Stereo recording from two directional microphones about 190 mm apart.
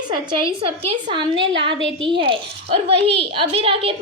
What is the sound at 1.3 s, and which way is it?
Speech, 70° right (ahead or behind).